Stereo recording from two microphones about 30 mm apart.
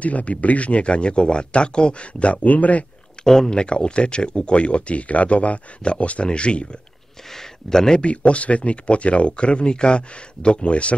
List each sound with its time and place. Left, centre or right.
0.0 s speech: left
2.4 s speech: left
3.4 s speech: left
6.2 s speech: left
7.3 s speech: centre
8.0 s speech: left